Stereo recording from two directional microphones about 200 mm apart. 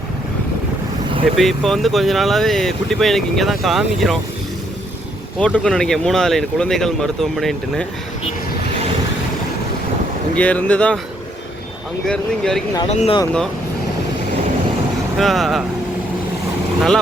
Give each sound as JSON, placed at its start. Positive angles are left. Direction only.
{"t": 1.4, "sound": "speech", "side_deg": 0}
{"t": 5.5, "sound": "speech", "side_deg": 5}
{"t": 10.3, "sound": "speech", "side_deg": 5}
{"t": 12.0, "sound": "speech", "side_deg": 5}
{"t": 12.9, "sound": "speech", "side_deg": 30}
{"t": 15.2, "sound": "speech", "side_deg": 0}